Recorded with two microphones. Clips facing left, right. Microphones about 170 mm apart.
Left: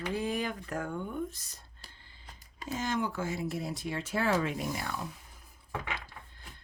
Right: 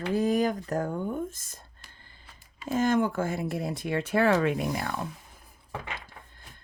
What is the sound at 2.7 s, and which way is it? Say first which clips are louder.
Speech: right 8 dB; 50° right (ahead or behind).